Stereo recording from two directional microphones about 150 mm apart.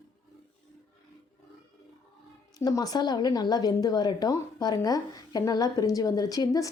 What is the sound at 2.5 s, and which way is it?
Speech, 25° left (ahead or behind).